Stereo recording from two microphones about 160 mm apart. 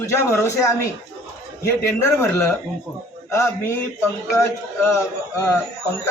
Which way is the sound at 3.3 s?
15° left (ahead or behind).